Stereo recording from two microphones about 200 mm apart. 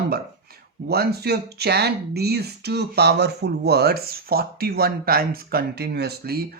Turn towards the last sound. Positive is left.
turn(degrees=-55)  # may be behind; listen again after turning